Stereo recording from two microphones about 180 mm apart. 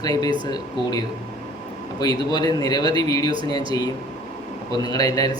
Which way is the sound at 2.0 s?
25° left (ahead or behind).